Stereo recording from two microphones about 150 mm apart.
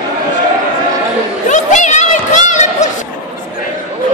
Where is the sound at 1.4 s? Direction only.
55° left (ahead or behind).